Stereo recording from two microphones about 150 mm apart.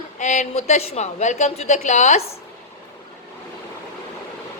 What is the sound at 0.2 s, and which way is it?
A woman's voice, 50° left (ahead or behind).